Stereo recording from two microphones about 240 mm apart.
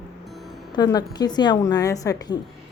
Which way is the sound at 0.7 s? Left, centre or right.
Centre.